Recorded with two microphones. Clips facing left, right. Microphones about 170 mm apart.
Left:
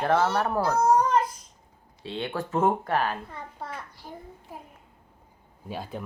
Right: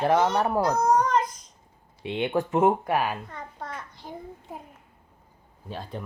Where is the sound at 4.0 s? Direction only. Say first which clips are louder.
Right 3 dB; 20° right (ahead or behind).